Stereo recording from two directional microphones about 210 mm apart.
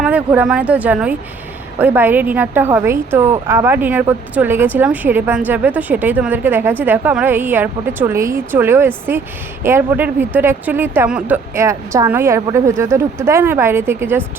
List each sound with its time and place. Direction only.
0.0 s a woman's voice: 5° right (ahead or behind)